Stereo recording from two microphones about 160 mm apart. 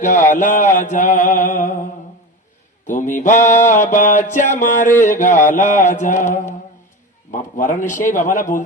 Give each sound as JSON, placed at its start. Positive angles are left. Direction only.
{"t": 0.3, "sound": "mantra", "side_deg": 50}
{"t": 2.8, "sound": "a sound", "side_deg": 55}
{"t": 7.3, "sound": "a man's voice", "side_deg": 55}